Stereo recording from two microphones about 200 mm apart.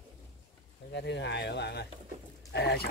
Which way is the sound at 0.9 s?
60° left (ahead or behind).